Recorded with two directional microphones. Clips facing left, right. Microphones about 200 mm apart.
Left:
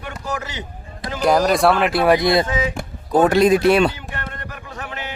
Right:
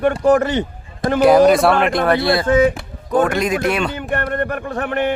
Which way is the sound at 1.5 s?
Centre (ahead or behind).